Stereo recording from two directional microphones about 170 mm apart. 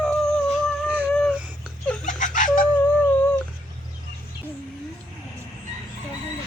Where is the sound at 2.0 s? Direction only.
50° left (ahead or behind).